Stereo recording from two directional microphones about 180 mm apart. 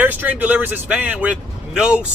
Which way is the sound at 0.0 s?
10° right (ahead or behind).